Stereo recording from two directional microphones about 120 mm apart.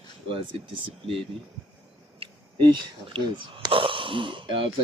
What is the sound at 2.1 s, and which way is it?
Speech, 45° right (ahead or behind).